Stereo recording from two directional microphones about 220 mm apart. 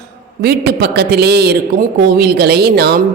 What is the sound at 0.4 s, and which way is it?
Speech, 45° right (ahead or behind).